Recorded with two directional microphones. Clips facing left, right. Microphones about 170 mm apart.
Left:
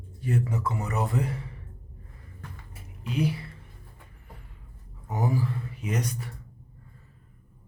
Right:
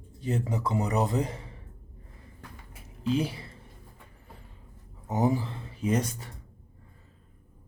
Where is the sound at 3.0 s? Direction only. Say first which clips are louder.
Right 1 dB; 25° right (ahead or behind).